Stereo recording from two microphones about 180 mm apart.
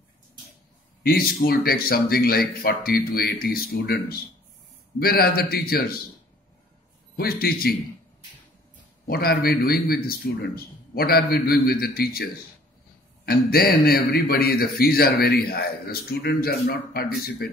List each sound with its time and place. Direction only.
1.0 s a man's voice: 55° left (ahead or behind)
7.2 s a man's voice: 60° left (ahead or behind)
9.0 s a man's voice: 60° left (ahead or behind)